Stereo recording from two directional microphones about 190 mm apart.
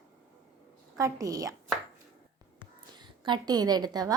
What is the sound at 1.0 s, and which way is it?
Speech, 15° right (ahead or behind).